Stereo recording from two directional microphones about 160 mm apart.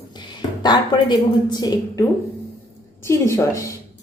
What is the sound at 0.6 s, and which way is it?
A woman's voice, 25° left (ahead or behind).